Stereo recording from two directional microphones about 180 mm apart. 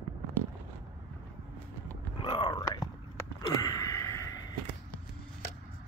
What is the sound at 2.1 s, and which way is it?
Whispering, 25° left (ahead or behind).